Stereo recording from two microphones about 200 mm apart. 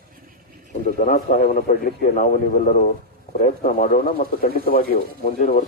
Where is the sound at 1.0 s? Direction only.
40° left (ahead or behind).